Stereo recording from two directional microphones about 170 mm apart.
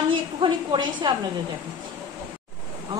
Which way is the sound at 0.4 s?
30° right (ahead or behind).